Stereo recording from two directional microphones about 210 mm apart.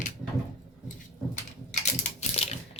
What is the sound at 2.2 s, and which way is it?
Typewriter, 30° left (ahead or behind).